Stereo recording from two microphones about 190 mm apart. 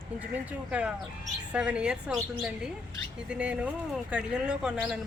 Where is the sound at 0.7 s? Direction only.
5° right (ahead or behind).